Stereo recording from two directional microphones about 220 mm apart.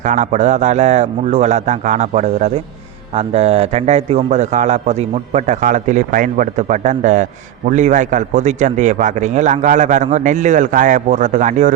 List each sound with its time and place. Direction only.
0.0 s a man's voice: 35° right (ahead or behind)